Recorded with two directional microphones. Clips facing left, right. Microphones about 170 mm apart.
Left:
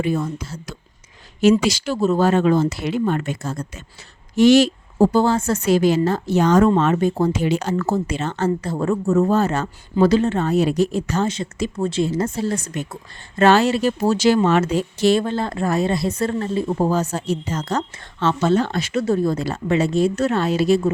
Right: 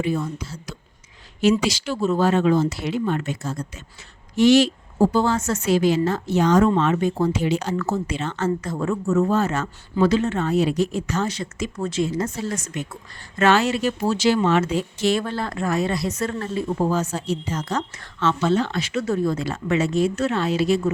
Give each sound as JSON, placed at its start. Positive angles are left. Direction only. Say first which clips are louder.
{"t": 0.0, "sound": "speech", "louder": "left 2 dB", "side_deg": 50}
{"t": 5.1, "sound": "a woman's voice", "louder": "left 3 dB", "side_deg": 30}
{"t": 7.4, "sound": "speech", "louder": "left 2 dB", "side_deg": 50}
{"t": 7.9, "sound": "a woman's voice", "louder": "left 3 dB", "side_deg": 35}
{"t": 15.2, "sound": "a woman's voice", "louder": "left 4 dB", "side_deg": 25}
{"t": 19.0, "sound": "a woman's voice", "louder": "left 3 dB", "side_deg": 35}